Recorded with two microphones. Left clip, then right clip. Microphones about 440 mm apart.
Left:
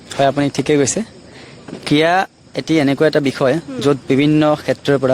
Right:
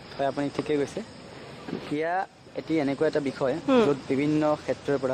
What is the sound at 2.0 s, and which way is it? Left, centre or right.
Speech, left.